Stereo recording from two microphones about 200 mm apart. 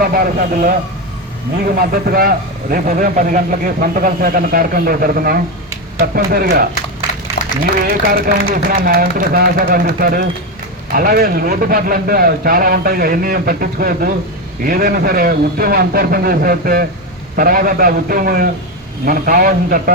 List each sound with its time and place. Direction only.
0.0 s speech: 45° right (ahead or behind)
1.8 s speech: 45° right (ahead or behind)
7.4 s a sound: 50° left (ahead or behind)
8.0 s speech: 45° right (ahead or behind)